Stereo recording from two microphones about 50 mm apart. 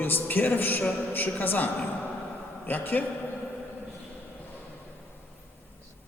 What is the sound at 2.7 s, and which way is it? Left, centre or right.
Speech, left.